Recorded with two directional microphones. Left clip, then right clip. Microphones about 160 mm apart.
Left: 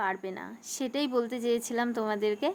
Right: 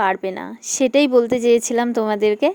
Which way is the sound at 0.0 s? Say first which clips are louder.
Right 12 dB; 50° right (ahead or behind).